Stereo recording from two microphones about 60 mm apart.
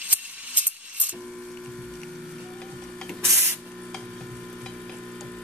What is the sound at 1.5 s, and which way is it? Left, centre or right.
Printer, centre.